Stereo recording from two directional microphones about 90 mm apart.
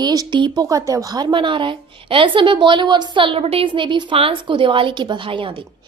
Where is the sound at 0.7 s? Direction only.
40° right (ahead or behind); by 5.6 s 75° right (ahead or behind).